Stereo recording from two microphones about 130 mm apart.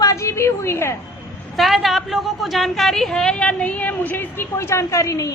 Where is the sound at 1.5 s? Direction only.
Centre (ahead or behind).